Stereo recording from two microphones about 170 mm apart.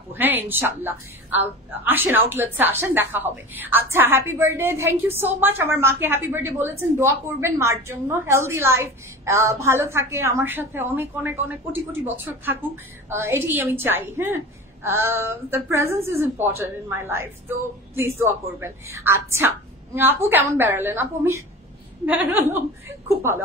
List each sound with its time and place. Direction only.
0.1 s a woman's voice: 10° right (ahead or behind)